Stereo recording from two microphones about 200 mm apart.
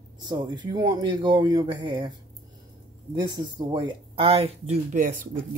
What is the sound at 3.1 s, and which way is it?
Speech, 20° right (ahead or behind).